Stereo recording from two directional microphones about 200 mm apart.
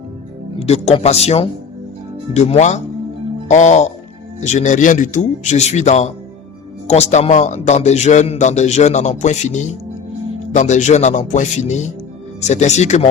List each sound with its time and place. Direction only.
0.6 s a man's voice: 30° left (ahead or behind)